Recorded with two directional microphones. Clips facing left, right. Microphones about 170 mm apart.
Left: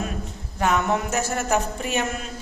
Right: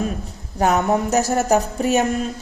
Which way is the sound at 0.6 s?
40° right (ahead or behind).